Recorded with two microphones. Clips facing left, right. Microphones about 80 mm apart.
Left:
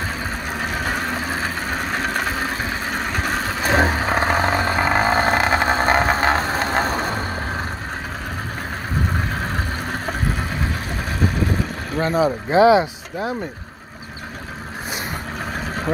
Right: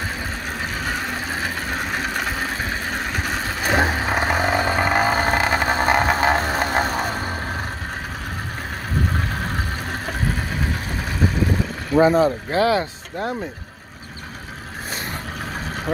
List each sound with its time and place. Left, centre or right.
3.8 s vehicle: centre
5.0 s vehicle: left
5.6 s vehicle: centre
12.1 s speech: centre
13.2 s speech: centre